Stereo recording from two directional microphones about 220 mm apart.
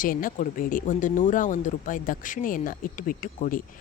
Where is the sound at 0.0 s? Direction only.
40° left (ahead or behind).